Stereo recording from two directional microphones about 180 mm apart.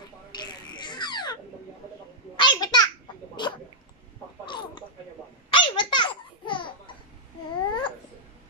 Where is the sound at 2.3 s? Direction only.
25° left (ahead or behind).